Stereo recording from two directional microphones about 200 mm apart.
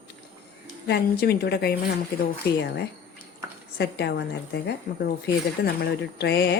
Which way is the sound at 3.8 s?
55° left (ahead or behind).